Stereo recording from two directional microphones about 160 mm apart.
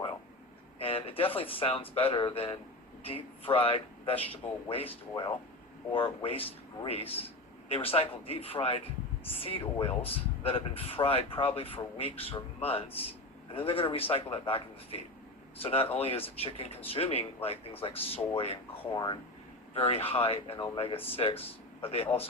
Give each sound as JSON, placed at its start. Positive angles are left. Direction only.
{"t": 0.8, "sound": "speech", "side_deg": 35}
{"t": 19.7, "sound": "speech", "side_deg": 40}